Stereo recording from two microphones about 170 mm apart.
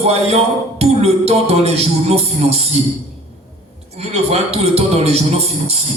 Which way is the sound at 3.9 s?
40° right (ahead or behind).